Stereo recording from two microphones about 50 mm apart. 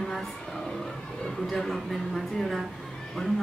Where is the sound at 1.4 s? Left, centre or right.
Centre.